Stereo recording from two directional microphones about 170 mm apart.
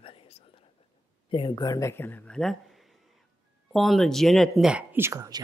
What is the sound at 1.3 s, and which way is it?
Speech, 25° left (ahead or behind).